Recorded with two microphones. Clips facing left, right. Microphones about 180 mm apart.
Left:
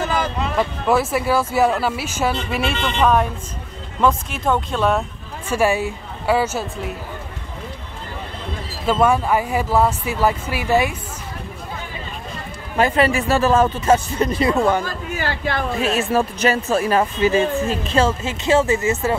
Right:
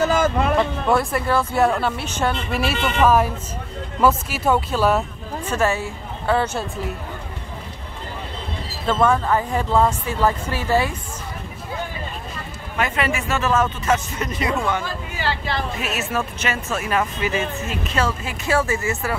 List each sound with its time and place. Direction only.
0.0 s a sound: 45° right (ahead or behind)
0.6 s speech: 5° left (ahead or behind)
5.5 s speech: 15° left (ahead or behind)
8.8 s speech: 10° left (ahead or behind)
12.7 s speech: 35° left (ahead or behind); by 15.6 s 50° left (ahead or behind)
15.8 s speech: 30° left (ahead or behind)